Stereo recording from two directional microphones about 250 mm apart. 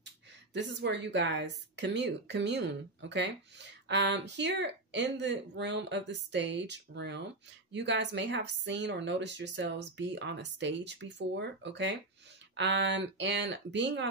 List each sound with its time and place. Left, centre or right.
0.0 s a woman's voice: right